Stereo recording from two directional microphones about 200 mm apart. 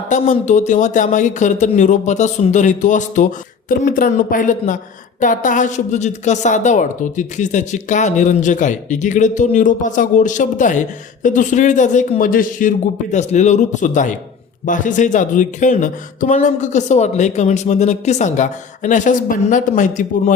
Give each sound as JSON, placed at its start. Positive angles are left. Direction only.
{"t": 0.1, "sound": "a woman's voice", "side_deg": 40}